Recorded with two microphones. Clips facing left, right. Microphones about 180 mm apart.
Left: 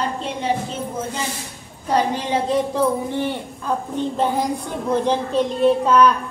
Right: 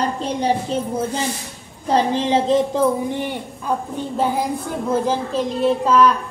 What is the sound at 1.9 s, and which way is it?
Speech, 25° right (ahead or behind).